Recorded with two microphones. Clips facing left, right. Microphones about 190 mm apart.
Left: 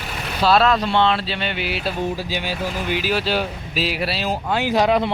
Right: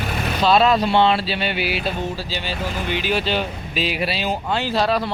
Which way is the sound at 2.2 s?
15° left (ahead or behind).